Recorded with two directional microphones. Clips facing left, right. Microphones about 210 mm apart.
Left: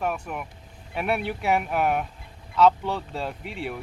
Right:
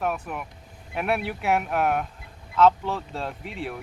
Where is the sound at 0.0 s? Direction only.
Centre (ahead or behind).